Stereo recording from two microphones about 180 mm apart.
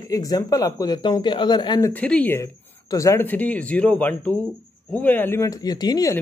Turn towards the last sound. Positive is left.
turn(degrees=20)  # may be behind; listen again after turning